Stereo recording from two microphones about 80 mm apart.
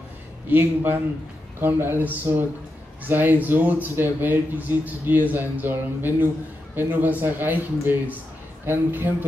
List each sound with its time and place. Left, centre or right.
0.5 s speech: right